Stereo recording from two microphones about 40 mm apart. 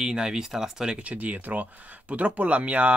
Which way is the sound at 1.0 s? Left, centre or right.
Right.